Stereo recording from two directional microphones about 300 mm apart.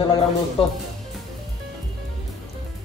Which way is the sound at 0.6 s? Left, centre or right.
Centre.